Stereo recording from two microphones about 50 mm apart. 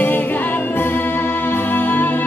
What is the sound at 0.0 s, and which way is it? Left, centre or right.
Music, left.